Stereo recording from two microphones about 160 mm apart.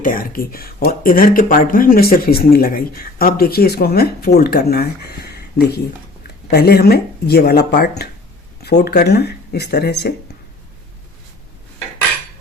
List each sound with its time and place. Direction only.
0.0 s a woman's voice: 60° left (ahead or behind); by 10.1 s 90° left